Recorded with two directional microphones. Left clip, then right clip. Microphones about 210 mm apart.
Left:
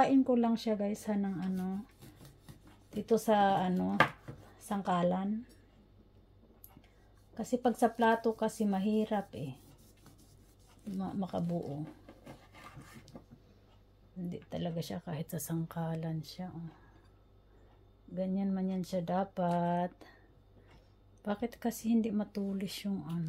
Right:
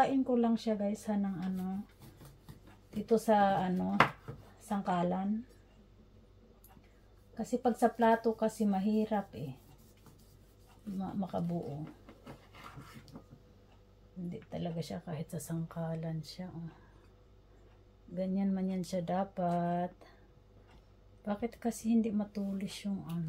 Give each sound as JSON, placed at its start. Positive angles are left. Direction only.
{"t": 0.0, "sound": "speech", "side_deg": 40}
{"t": 2.9, "sound": "a woman's voice", "side_deg": 40}
{"t": 7.3, "sound": "speech", "side_deg": 40}
{"t": 11.0, "sound": "speech", "side_deg": 40}
{"t": 14.3, "sound": "speech", "side_deg": 45}
{"t": 18.1, "sound": "speech", "side_deg": 15}
{"t": 21.2, "sound": "speech", "side_deg": 40}